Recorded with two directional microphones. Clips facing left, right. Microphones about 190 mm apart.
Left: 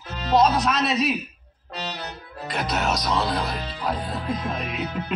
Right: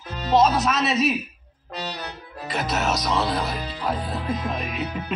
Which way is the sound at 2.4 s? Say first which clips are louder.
Right 1 dB; centre (ahead or behind).